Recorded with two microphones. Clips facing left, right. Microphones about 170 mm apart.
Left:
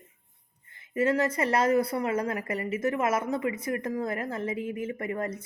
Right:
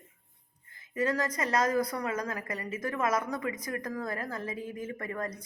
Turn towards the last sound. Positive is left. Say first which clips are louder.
# left 4 dB
turn(degrees=25)  # may be behind; listen again after turning